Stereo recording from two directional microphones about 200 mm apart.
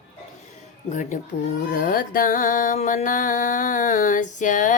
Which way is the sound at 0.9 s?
40° left (ahead or behind).